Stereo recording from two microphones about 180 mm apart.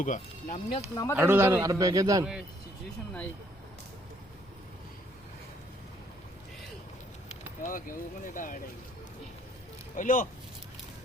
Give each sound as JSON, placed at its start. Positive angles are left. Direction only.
{"t": 0.0, "sound": "speech", "side_deg": 45}
{"t": 1.1, "sound": "a man's voice", "side_deg": -10}
{"t": 7.6, "sound": "speech", "side_deg": 50}
{"t": 9.9, "sound": "speech", "side_deg": 45}